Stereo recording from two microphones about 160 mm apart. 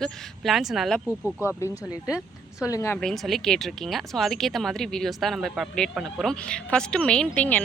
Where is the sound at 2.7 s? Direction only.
15° left (ahead or behind).